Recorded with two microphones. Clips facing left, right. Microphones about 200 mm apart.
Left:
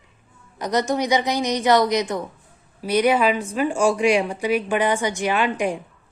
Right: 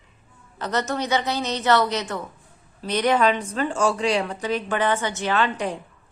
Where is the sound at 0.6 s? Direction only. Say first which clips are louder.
Left 4 dB; 15° left (ahead or behind).